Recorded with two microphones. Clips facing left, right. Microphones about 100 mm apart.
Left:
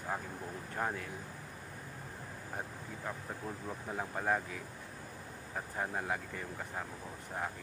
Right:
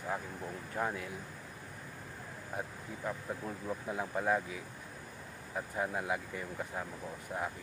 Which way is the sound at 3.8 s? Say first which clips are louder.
Right 1 dB; centre (ahead or behind).